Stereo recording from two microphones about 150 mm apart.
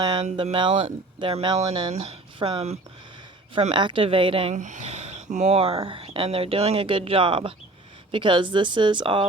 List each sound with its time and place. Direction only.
0.0 s speech: 30° right (ahead or behind)
1.9 s speech: 45° right (ahead or behind)
3.7 s speech: 30° right (ahead or behind)
4.5 s speech: 55° right (ahead or behind); by 9.2 s 30° right (ahead or behind)